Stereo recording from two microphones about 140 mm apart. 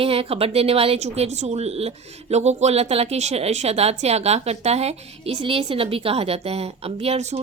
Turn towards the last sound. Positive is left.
turn(degrees=-50)  # may be behind; listen again after turning